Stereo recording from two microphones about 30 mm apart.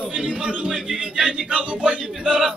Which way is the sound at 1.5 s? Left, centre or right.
Right.